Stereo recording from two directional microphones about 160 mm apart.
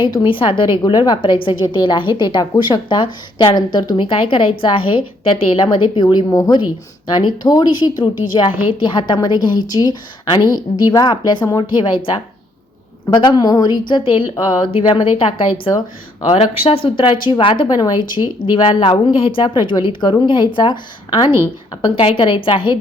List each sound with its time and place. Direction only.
0.0 s a woman's voice: 30° left (ahead or behind)
13.1 s a woman's voice: 25° left (ahead or behind)
16.2 s a woman's voice: 40° left (ahead or behind)